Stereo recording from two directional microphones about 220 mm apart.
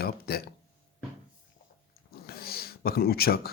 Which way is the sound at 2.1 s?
45° left (ahead or behind).